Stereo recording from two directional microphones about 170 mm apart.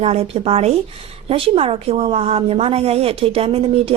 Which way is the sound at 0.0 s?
35° right (ahead or behind).